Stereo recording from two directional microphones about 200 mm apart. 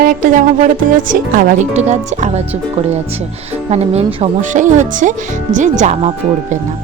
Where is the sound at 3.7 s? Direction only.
30° right (ahead or behind).